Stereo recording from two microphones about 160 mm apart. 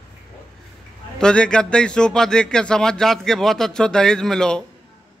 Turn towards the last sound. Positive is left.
turn(degrees=5)  # may be behind; listen again after turning